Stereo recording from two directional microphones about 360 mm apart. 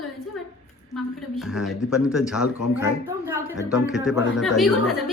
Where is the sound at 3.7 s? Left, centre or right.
Centre.